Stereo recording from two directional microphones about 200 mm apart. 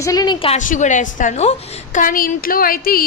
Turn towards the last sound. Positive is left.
turn(degrees=45)  # may be behind; listen again after turning